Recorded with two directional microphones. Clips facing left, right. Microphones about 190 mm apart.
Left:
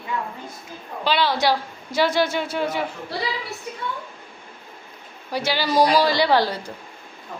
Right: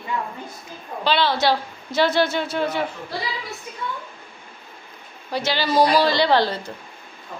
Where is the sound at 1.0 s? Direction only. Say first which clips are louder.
Right 1 dB; 10° left (ahead or behind).